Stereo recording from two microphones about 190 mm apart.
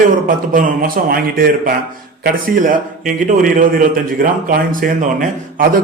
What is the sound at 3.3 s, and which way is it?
A man's voice, 45° right (ahead or behind).